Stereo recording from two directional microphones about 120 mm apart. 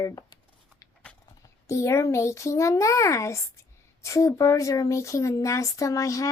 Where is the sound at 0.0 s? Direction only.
30° left (ahead or behind).